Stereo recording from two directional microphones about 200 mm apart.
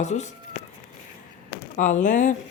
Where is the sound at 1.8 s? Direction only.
40° left (ahead or behind).